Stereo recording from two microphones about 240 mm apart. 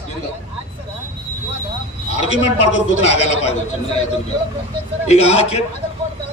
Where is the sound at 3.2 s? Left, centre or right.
Left.